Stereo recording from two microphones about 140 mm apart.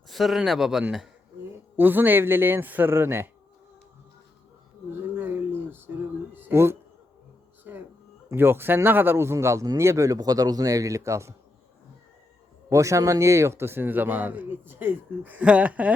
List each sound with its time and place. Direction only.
0.1 s speech: centre (ahead or behind)
1.7 s speech: 15° right (ahead or behind)
5.1 s a sound: 15° right (ahead or behind)
8.3 s speech: 15° right (ahead or behind)
12.7 s speech: 20° right (ahead or behind)